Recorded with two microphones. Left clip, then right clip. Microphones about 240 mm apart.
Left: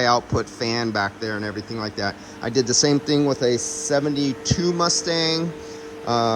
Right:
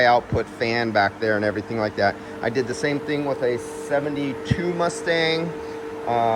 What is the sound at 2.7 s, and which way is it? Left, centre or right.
Speech, left.